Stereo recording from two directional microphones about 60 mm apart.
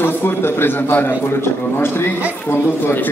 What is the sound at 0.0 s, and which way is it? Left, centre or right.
A man's voice, left.